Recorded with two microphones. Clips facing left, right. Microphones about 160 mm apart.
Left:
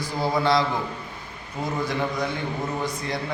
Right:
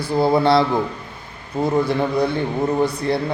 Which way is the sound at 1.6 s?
40° right (ahead or behind).